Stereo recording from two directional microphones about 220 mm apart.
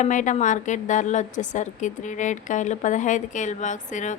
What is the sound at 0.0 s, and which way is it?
A woman's voice, 35° left (ahead or behind).